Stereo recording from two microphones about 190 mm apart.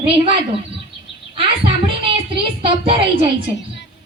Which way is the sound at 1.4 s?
30° right (ahead or behind).